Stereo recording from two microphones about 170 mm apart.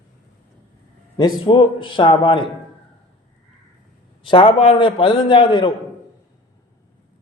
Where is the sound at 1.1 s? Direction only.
25° left (ahead or behind).